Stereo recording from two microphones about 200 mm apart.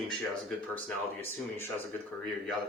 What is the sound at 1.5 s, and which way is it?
Speech, 10° left (ahead or behind).